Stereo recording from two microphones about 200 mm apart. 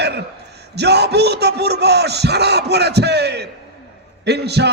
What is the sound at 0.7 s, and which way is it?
Speech, 55° right (ahead or behind).